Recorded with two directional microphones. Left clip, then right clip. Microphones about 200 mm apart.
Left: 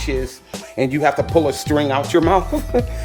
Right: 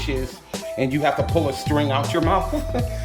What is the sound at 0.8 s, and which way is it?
Speech, 20° left (ahead or behind).